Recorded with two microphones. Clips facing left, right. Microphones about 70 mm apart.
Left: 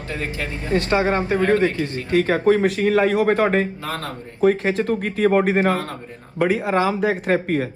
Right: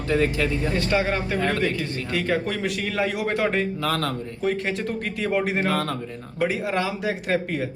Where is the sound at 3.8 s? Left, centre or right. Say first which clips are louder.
Right 3 dB; left.